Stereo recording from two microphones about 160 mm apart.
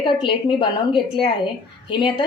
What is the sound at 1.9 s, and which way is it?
Speech, 30° left (ahead or behind).